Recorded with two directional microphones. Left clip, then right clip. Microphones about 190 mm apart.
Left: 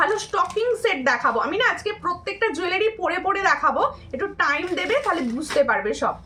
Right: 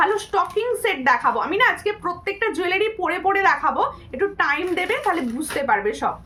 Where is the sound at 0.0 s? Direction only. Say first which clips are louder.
Right 1 dB; 15° right (ahead or behind).